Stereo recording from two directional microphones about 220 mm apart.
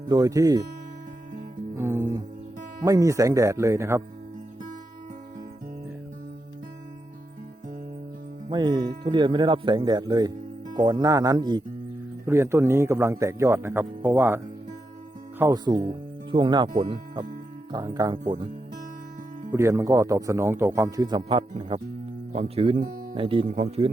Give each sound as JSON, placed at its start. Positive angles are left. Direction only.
{"t": 0.1, "sound": "speech", "side_deg": -15}
{"t": 1.7, "sound": "music", "side_deg": -10}
{"t": 2.8, "sound": "speech", "side_deg": -15}
{"t": 8.4, "sound": "speech", "side_deg": -20}
{"t": 19.5, "sound": "speech", "side_deg": -15}
{"t": 22.8, "sound": "speech", "side_deg": -40}
{"t": 23.1, "sound": "speech", "side_deg": -25}